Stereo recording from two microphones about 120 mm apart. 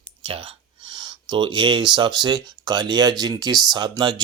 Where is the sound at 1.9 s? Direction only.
40° right (ahead or behind).